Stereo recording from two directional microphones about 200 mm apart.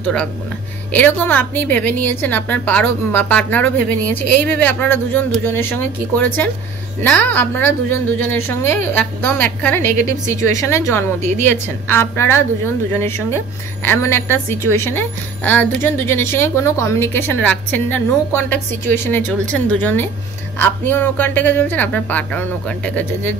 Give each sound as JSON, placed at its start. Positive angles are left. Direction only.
{"t": 0.0, "sound": "a woman's voice", "side_deg": 5}
{"t": 11.1, "sound": "a woman's voice", "side_deg": -35}
{"t": 11.4, "sound": "a woman's voice", "side_deg": 10}